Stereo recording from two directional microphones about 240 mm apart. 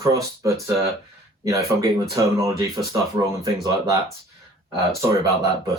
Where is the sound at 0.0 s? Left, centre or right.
Centre.